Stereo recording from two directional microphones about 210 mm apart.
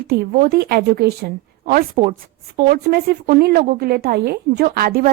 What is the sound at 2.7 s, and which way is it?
Speech, 50° right (ahead or behind).